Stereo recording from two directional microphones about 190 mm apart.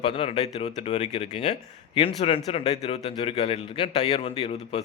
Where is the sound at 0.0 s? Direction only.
30° left (ahead or behind).